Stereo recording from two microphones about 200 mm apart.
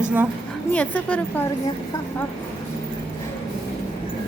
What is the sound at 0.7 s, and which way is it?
Speech, 5° left (ahead or behind).